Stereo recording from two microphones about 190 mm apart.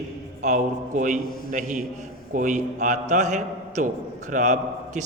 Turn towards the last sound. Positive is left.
turn(degrees=-40)  # may be behind; listen again after turning